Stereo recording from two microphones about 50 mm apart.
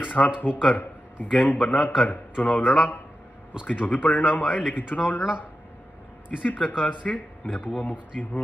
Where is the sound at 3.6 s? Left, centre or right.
Left.